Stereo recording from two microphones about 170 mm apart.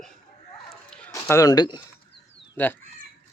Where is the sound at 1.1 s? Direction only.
20° left (ahead or behind).